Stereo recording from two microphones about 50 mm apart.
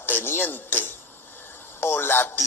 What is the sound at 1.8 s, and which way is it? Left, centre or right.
Speech, left.